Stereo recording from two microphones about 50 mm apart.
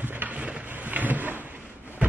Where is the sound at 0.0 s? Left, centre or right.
Right.